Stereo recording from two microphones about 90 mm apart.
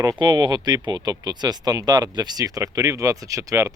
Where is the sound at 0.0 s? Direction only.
50° right (ahead or behind).